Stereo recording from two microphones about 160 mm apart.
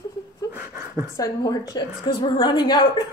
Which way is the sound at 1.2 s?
25° left (ahead or behind).